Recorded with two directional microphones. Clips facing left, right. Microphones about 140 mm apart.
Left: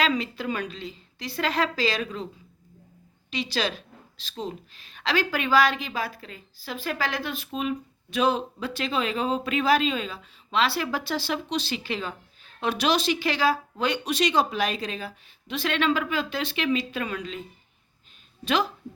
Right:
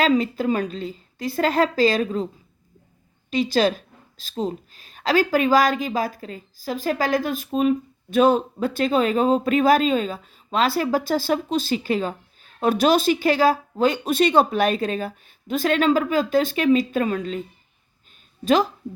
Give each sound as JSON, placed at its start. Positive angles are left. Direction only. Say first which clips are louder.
{"t": 0.0, "sound": "speech", "louder": "right 7 dB", "side_deg": -45}
{"t": 3.3, "sound": "speech", "louder": "right 9 dB", "side_deg": -45}
{"t": 18.4, "sound": "speech", "louder": "right 7 dB", "side_deg": -45}